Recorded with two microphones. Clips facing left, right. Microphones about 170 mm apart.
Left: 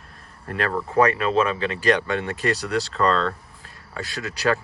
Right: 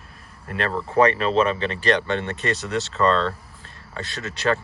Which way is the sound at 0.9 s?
30° right (ahead or behind).